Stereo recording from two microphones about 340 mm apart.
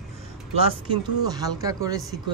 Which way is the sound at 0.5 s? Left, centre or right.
Centre.